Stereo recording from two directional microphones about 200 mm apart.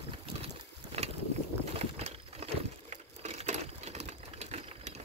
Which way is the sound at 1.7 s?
30° right (ahead or behind).